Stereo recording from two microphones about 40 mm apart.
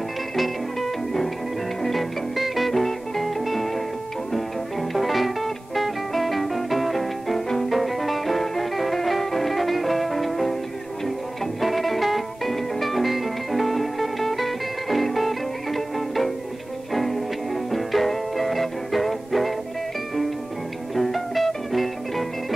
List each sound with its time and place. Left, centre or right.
0.4 s music: centre
4.9 s music: centre
11.6 s music: centre
20.9 s music: centre